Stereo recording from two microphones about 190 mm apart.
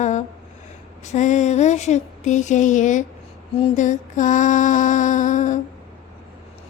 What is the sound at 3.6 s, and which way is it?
Mantra, 40° left (ahead or behind).